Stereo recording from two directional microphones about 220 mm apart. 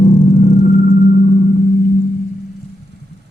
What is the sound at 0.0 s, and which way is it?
Vehicle, 35° left (ahead or behind).